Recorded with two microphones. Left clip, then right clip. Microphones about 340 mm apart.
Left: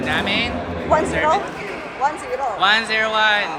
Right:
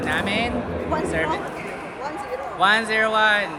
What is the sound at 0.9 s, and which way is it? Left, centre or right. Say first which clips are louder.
Speech: left 9 dB; centre.